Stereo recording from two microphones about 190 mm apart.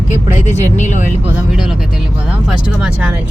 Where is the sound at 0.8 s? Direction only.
40° left (ahead or behind).